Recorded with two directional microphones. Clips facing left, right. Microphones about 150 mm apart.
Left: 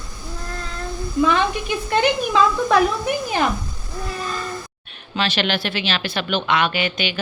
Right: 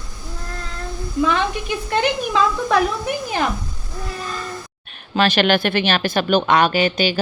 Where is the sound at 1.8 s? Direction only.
10° left (ahead or behind).